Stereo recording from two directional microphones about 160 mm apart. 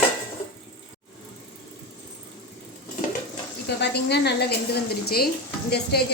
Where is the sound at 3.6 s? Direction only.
90° left.